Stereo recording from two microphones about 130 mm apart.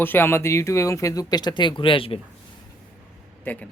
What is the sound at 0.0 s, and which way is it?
Speech, 15° left (ahead or behind).